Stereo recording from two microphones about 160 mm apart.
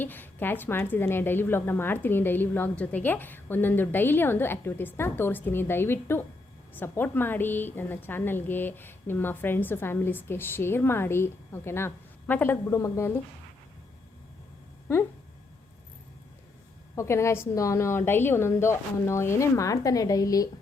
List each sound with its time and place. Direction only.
0.0 s a woman's voice: 10° left (ahead or behind)
16.9 s a woman's voice: 15° left (ahead or behind)